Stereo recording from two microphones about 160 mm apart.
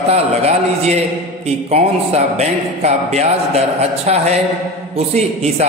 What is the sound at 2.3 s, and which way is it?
A man's voice, 40° right (ahead or behind).